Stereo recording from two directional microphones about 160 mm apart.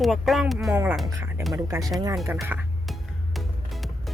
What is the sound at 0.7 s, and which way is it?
Speech, 15° right (ahead or behind).